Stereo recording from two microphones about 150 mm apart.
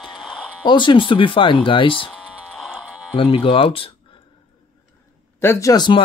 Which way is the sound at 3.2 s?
35° left (ahead or behind).